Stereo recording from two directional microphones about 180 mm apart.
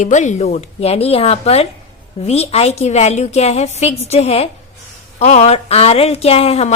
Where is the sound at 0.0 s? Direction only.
40° left (ahead or behind).